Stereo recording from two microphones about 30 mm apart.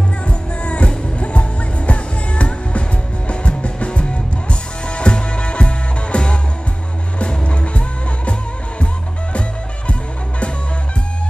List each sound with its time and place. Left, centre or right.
0.3 s music: left